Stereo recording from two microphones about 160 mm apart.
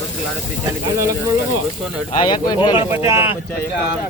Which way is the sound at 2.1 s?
30° left (ahead or behind).